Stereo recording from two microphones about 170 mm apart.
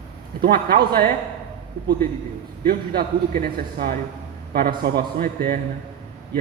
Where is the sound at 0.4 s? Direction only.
65° right (ahead or behind).